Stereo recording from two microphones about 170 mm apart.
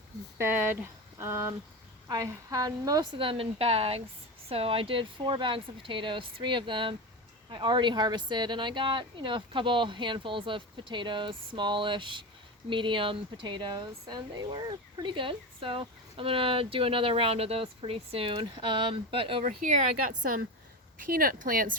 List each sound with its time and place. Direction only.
0.3 s speech: 15° right (ahead or behind); by 21.8 s 55° right (ahead or behind)